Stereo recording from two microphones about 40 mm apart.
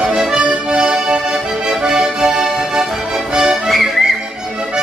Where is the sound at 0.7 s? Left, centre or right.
Right.